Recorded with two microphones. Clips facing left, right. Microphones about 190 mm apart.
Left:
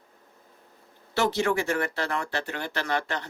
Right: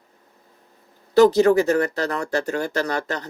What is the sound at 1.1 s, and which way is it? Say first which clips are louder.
Speech: right 11 dB; 40° right (ahead or behind).